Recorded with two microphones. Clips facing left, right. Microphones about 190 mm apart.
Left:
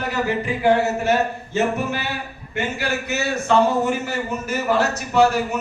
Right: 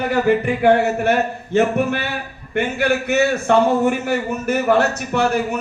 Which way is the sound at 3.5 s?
55° right (ahead or behind).